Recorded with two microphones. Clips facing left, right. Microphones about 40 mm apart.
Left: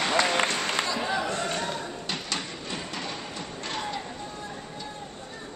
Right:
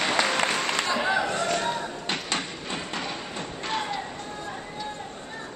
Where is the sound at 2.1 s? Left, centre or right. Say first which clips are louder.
Right 4 dB; right.